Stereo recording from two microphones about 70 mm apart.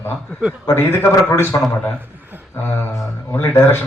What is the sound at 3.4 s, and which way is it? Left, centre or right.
Speech, left.